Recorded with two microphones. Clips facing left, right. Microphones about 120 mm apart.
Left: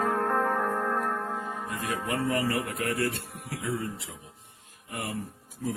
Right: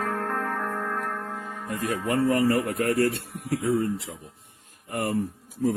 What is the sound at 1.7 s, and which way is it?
Music, 45° right (ahead or behind).